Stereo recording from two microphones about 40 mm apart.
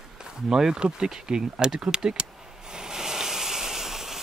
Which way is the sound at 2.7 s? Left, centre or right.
Centre.